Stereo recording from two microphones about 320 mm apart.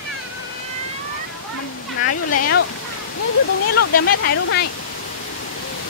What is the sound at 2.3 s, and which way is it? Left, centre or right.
Speech, left.